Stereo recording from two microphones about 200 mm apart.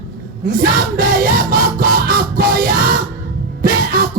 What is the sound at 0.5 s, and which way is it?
Music, 50° right (ahead or behind).